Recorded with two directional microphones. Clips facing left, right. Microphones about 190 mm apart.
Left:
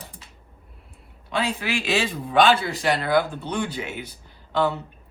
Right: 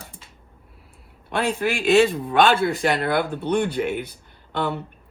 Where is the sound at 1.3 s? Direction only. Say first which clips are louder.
Right 3 dB; 55° right (ahead or behind).